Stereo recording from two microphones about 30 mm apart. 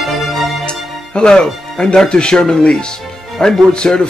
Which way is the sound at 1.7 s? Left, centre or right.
Left.